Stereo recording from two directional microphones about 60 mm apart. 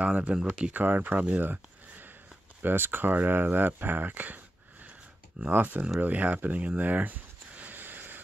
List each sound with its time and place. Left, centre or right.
0.0 s speech: right
0.7 s speech: right
5.5 s speech: right
5.9 s a sound: right